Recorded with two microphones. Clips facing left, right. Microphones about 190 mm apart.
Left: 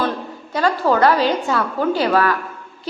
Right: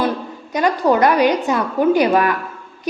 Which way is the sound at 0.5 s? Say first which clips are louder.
Right 2 dB; 15° right (ahead or behind).